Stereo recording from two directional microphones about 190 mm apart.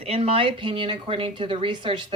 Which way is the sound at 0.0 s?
30° right (ahead or behind).